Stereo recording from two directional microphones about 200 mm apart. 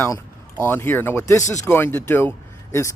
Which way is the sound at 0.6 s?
10° left (ahead or behind).